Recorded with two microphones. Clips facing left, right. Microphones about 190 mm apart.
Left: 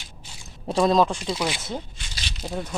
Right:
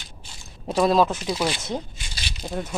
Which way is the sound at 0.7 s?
5° right (ahead or behind).